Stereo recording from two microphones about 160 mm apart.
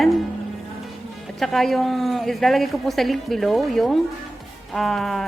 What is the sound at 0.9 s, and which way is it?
Speech, centre (ahead or behind).